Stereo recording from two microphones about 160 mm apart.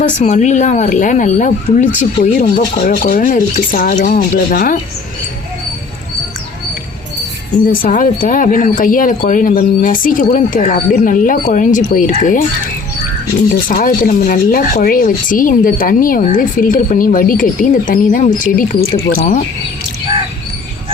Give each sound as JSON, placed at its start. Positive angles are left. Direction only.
{"t": 0.2, "sound": "speech", "side_deg": 45}
{"t": 4.2, "sound": "speech", "side_deg": 70}
{"t": 7.7, "sound": "speech", "side_deg": 60}
{"t": 13.7, "sound": "speech", "side_deg": 60}